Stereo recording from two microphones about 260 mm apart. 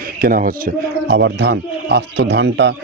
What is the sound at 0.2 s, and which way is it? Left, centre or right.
Speech, right.